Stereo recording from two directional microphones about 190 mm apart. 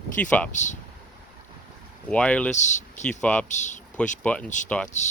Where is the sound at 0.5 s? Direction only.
40° left (ahead or behind).